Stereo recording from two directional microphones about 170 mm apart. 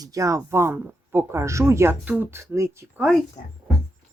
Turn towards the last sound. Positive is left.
turn(degrees=45)  # may be behind; listen again after turning